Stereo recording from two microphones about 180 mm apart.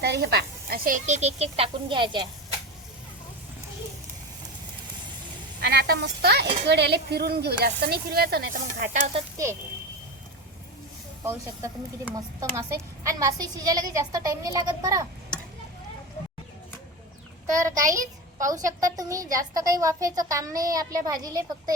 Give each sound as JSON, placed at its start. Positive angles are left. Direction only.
{"t": 0.0, "sound": "speech", "side_deg": -65}
{"t": 5.5, "sound": "speech", "side_deg": -60}
{"t": 11.2, "sound": "a woman's voice", "side_deg": -15}
{"t": 17.5, "sound": "a child's voice", "side_deg": -20}